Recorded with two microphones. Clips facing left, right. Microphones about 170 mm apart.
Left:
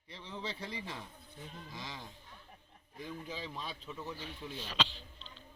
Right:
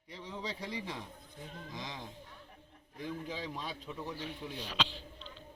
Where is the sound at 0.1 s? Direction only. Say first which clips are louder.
Right 1 dB; 10° right (ahead or behind).